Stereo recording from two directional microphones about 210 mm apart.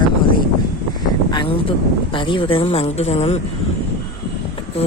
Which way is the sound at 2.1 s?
25° left (ahead or behind).